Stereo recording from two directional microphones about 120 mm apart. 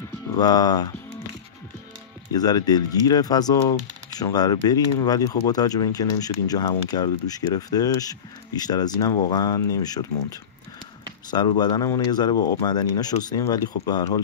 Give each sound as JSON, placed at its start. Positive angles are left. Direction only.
{"t": 0.4, "sound": "speech", "side_deg": 35}
{"t": 2.3, "sound": "speech", "side_deg": 35}